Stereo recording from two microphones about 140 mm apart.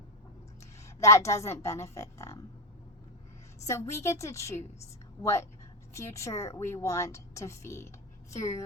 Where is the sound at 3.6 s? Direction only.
20° left (ahead or behind).